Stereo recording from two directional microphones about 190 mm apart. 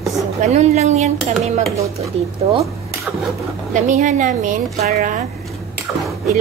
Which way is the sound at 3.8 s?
40° right (ahead or behind).